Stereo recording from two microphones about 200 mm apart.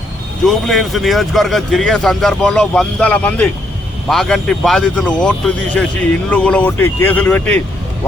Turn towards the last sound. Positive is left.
turn(degrees=5)  # may be behind; listen again after turning